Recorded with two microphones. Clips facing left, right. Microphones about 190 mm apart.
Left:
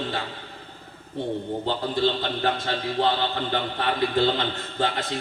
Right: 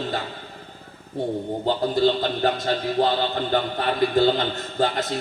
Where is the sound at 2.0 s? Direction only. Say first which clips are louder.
Right 3 dB; 40° right (ahead or behind).